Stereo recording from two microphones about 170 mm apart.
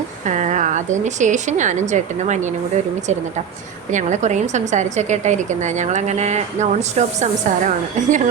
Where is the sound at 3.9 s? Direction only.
45° right (ahead or behind).